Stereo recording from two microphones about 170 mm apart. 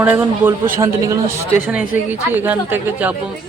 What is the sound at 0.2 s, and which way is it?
A woman's voice, 10° right (ahead or behind).